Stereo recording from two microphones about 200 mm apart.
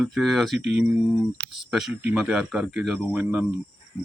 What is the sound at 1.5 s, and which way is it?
Speech, centre (ahead or behind).